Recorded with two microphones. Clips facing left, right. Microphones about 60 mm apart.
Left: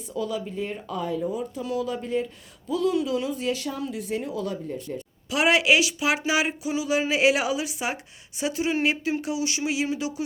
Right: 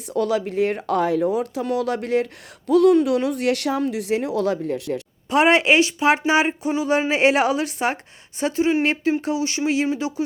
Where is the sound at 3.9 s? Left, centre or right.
Right.